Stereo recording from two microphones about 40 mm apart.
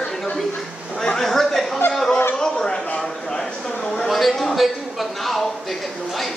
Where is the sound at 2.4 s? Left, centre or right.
Centre.